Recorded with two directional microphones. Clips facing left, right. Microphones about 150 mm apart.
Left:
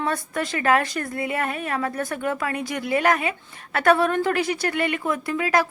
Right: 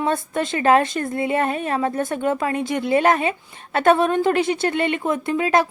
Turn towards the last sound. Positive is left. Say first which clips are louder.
# right 3 dB
turn(degrees=-25)  # may be behind; listen again after turning